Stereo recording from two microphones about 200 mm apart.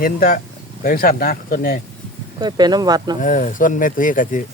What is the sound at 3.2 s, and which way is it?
Speech, 40° left (ahead or behind).